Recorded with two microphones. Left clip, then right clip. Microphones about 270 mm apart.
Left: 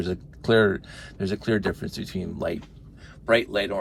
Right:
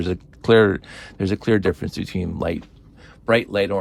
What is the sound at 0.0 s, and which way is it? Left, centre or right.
Speech, right.